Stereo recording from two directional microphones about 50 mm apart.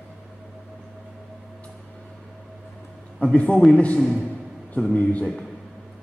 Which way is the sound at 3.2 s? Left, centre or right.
Left.